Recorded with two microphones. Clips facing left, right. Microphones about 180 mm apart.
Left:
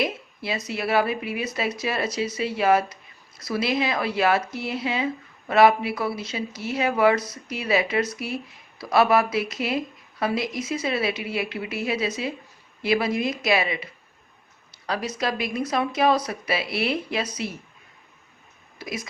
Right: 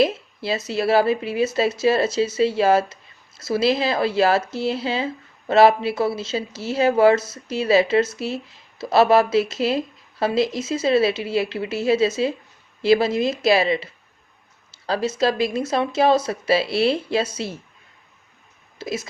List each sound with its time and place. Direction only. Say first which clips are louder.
0.0 s speech: right 7 dB; 30° right (ahead or behind)
14.8 s speech: right 6 dB; 30° right (ahead or behind)
18.8 s speech: right 5 dB; 25° right (ahead or behind)